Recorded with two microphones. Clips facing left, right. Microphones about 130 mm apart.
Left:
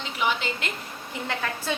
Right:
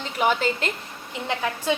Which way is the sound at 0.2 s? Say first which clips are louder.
Right 5 dB; 45° right (ahead or behind).